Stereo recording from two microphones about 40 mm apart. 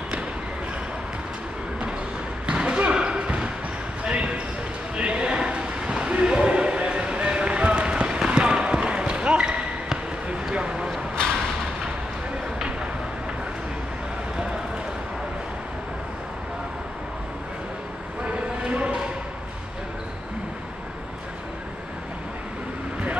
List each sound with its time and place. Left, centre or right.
2.4 s basketball bounce: right
4.9 s a sound: right
10.2 s basketball bounce: right
18.2 s vehicle: right